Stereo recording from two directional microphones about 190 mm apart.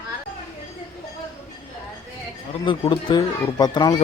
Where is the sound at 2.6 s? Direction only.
25° left (ahead or behind).